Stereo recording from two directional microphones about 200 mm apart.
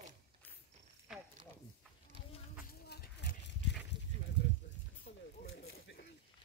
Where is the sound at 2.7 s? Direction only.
50° left (ahead or behind).